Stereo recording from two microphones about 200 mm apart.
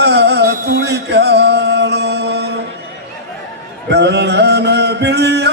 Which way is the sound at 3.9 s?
55° right (ahead or behind).